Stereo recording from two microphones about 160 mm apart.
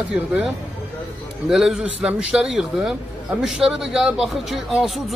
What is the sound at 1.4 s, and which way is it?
A man's voice, centre (ahead or behind).